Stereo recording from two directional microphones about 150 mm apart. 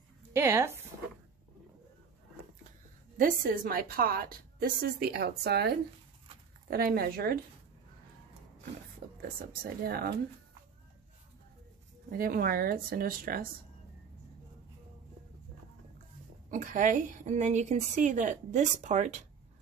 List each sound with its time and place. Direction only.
0.3 s speech: 15° right (ahead or behind)
3.2 s a woman's voice: 70° right (ahead or behind); by 7.3 s 90° right
9.0 s a sound: 70° right (ahead or behind)
9.4 s a woman's voice: 70° right (ahead or behind); by 10.1 s 90° right
12.1 s speech: 70° right (ahead or behind)
16.4 s a woman's voice: 60° right (ahead or behind)